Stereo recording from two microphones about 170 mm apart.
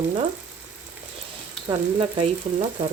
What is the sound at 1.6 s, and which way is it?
Speech, 30° right (ahead or behind).